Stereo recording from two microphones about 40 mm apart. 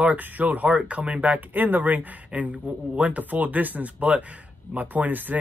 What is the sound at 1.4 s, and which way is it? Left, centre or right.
Speech, right.